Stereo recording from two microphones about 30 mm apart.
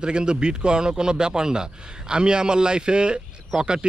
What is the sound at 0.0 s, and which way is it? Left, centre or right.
Speech, right.